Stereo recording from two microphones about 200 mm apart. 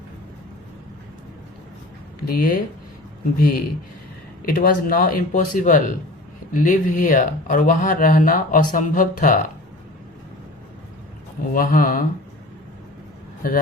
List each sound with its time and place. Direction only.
2.2 s speech: 45° left (ahead or behind)
11.5 s speech: 45° left (ahead or behind)